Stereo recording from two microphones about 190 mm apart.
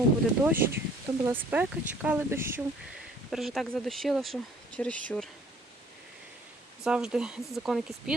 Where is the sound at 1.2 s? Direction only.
10° right (ahead or behind).